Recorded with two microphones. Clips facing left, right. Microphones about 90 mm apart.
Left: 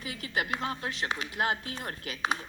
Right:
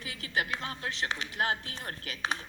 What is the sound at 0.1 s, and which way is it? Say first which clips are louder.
A man's voice: left 1 dB; 25° left (ahead or behind).